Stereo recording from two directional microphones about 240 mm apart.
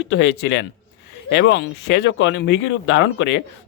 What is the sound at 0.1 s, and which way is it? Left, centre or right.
Speech, left.